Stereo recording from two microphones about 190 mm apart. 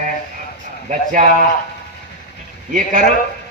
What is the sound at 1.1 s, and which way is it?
Speech, 40° right (ahead or behind).